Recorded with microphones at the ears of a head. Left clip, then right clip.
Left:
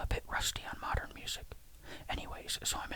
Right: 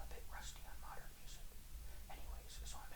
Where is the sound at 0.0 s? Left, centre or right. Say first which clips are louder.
Left 19 dB; left.